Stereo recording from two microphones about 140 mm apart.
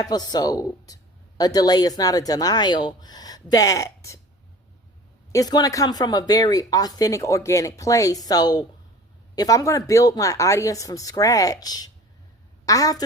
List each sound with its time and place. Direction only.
0.0 s speech: 30° left (ahead or behind)
5.3 s a woman's voice: 25° left (ahead or behind)